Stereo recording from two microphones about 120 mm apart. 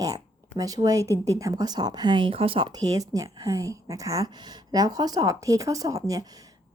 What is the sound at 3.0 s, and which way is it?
A woman's voice, 30° right (ahead or behind).